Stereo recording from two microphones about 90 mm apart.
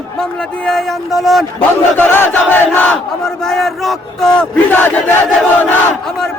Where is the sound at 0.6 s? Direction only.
5° left (ahead or behind).